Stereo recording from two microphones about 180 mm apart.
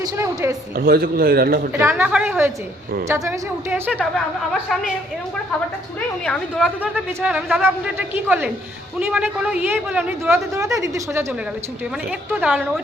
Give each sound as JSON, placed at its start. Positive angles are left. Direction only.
{"t": 0.8, "sound": "a man's voice", "side_deg": -55}
{"t": 1.8, "sound": "a woman's voice", "side_deg": -10}
{"t": 6.6, "sound": "a woman's voice", "side_deg": -5}
{"t": 12.3, "sound": "a woman's voice", "side_deg": -10}